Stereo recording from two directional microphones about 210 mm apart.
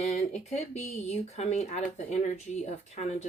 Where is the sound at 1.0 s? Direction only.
30° left (ahead or behind).